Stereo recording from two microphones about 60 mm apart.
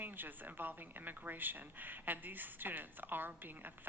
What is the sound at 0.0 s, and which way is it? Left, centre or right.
Speech, right.